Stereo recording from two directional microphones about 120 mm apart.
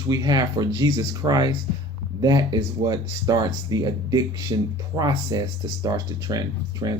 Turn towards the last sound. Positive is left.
turn(degrees=-30)  # may be behind; listen again after turning